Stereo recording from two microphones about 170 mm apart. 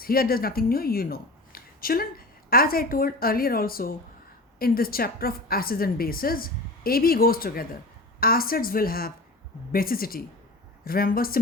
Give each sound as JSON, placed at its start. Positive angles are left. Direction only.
{"t": 0.0, "sound": "a woman's voice", "side_deg": 60}